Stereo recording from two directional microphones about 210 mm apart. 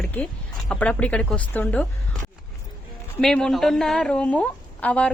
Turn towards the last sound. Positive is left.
turn(degrees=5)  # may be behind; listen again after turning